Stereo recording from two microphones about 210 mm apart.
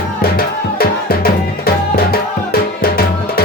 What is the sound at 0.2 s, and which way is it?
Music, 45° left (ahead or behind).